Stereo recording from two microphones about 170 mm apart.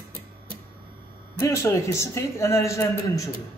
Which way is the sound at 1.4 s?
20° left (ahead or behind).